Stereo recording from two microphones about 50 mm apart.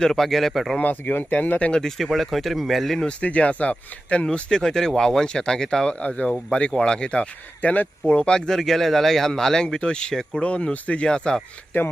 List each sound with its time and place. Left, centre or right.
0.0 s speech: centre
0.8 s speech: left
2.0 s speech: centre
3.0 s speech: left